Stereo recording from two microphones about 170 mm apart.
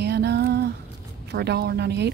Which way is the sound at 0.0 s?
70° right (ahead or behind).